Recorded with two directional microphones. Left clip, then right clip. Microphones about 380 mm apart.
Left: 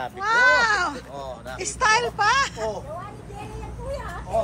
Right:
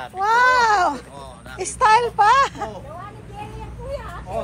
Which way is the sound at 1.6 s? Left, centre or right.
Centre.